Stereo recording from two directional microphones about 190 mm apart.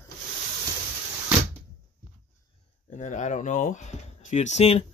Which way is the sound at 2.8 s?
40° left (ahead or behind).